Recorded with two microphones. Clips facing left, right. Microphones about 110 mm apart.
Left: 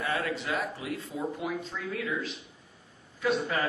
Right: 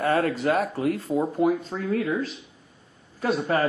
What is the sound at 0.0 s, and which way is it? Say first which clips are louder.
Speech: right 9 dB; 45° right (ahead or behind).